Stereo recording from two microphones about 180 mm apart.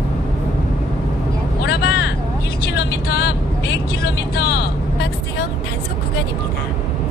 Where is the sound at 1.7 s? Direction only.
75° left (ahead or behind).